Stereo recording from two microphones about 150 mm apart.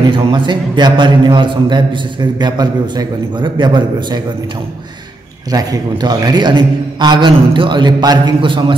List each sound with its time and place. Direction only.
0.1 s a man's voice: 30° right (ahead or behind)
5.5 s a man's voice: 25° right (ahead or behind)